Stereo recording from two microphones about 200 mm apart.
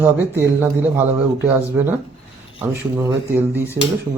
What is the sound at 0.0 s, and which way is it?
Speech, 10° right (ahead or behind).